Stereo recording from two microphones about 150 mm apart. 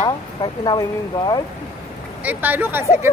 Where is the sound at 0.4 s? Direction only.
30° left (ahead or behind).